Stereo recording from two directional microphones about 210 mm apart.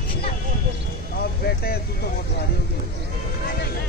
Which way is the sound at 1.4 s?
50° left (ahead or behind).